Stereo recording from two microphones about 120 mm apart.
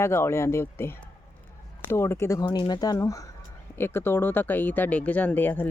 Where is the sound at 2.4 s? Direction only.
40° left (ahead or behind).